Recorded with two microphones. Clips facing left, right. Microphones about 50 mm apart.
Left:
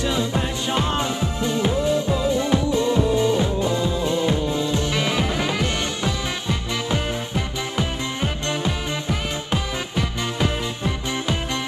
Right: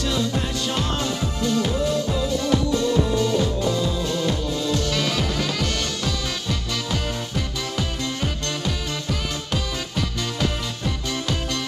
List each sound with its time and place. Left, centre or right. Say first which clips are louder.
0.0 s music: left 1 dB; left